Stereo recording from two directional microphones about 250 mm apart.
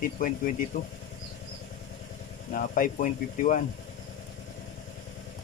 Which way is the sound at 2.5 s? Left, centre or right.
Left.